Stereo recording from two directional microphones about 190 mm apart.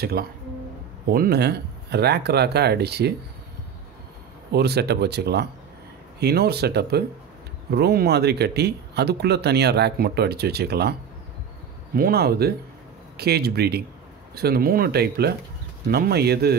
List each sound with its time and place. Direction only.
0.0 s speech: 55° right (ahead or behind)
4.5 s speech: 60° right (ahead or behind)